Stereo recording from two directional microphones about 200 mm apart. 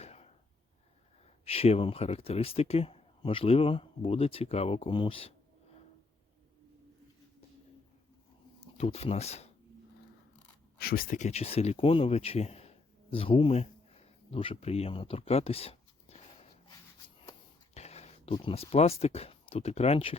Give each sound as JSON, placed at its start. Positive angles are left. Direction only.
{"t": 0.0, "sound": "a sound", "side_deg": 30}
{"t": 1.5, "sound": "speech", "side_deg": 30}
{"t": 8.6, "sound": "speech", "side_deg": 30}
{"t": 10.8, "sound": "speech", "side_deg": 50}
{"t": 17.7, "sound": "speech", "side_deg": 30}